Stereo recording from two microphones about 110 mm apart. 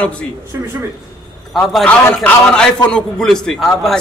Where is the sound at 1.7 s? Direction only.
10° left (ahead or behind).